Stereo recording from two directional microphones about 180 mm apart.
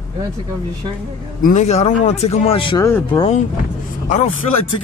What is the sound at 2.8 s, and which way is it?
Speech, 10° left (ahead or behind).